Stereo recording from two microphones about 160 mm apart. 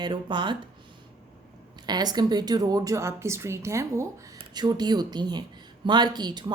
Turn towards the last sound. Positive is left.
turn(degrees=-25)  # may be behind; listen again after turning